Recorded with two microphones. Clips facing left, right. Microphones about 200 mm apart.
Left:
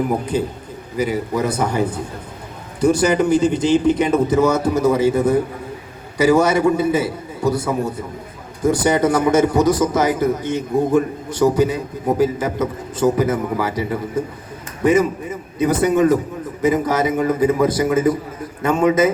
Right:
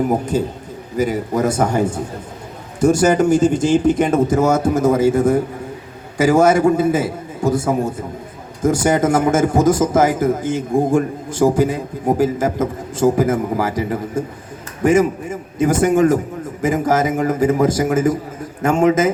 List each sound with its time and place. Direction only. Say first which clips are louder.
0.3 s a man's voice: right 1 dB; 45° right (ahead or behind)